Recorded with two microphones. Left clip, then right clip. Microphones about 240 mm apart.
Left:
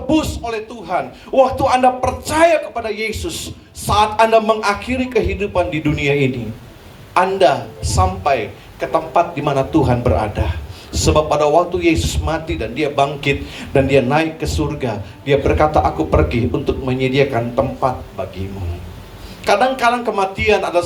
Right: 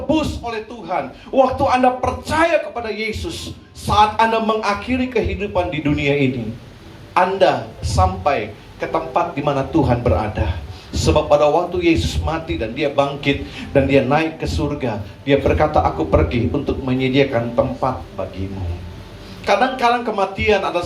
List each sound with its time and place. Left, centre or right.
0.1 s a man's voice: left
19.5 s a man's voice: left